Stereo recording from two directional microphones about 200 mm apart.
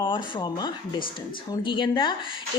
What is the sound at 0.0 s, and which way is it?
A woman's voice, 25° left (ahead or behind).